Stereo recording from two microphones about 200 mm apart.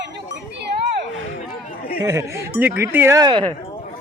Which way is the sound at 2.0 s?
15° right (ahead or behind).